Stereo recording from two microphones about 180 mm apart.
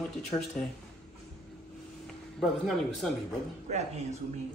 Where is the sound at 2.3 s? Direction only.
Centre (ahead or behind).